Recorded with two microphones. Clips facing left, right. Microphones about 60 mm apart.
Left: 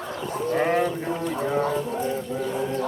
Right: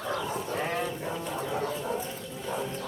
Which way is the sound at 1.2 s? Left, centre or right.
Left.